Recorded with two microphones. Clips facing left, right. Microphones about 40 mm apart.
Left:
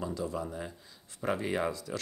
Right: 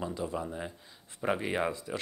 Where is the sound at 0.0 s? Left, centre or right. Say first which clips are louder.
Even; right.